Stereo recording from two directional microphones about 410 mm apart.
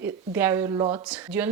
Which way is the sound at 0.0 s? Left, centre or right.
Centre.